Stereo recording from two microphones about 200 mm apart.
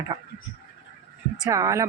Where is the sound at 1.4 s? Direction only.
15° right (ahead or behind).